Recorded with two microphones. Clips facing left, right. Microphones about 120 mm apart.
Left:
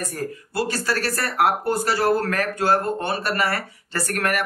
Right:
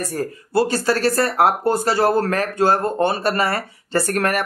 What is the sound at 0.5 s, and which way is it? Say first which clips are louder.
Speech: right 7 dB; 25° right (ahead or behind).